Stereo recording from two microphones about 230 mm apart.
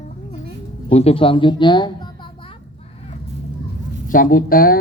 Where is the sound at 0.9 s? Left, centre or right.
Left.